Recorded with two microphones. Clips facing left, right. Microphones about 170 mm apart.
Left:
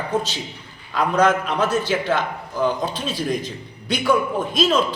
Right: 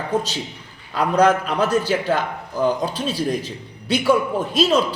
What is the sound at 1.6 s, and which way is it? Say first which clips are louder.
A man's voice: right 1 dB; 10° right (ahead or behind).